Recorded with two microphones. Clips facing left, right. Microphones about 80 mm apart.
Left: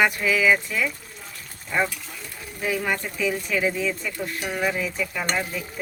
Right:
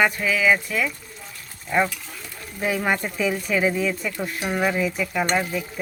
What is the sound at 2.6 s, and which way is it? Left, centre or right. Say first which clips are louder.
Speech: right 3 dB; right.